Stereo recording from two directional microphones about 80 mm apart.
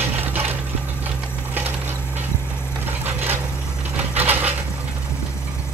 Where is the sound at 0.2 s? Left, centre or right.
Right.